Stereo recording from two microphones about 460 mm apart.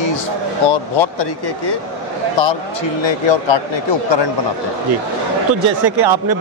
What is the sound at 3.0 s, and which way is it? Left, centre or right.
Speech, left.